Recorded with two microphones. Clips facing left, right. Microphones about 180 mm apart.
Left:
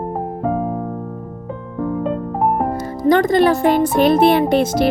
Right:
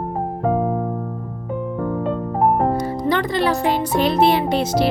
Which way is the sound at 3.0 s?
45° left (ahead or behind).